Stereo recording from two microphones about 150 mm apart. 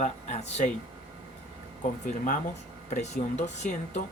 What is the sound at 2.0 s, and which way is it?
Speech, 60° left (ahead or behind).